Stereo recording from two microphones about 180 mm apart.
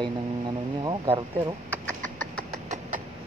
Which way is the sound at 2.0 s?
45° right (ahead or behind).